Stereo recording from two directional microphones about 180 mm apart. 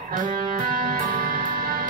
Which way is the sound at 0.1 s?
50° right (ahead or behind).